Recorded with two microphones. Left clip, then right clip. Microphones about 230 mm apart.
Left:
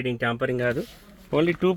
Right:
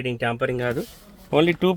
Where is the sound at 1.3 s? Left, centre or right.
Centre.